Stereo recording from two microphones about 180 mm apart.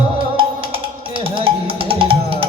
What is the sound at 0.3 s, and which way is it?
Music, 30° right (ahead or behind).